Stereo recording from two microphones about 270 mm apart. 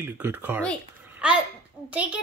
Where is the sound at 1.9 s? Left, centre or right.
Centre.